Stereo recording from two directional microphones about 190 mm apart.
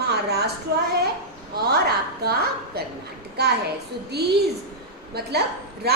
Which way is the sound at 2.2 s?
55° right (ahead or behind).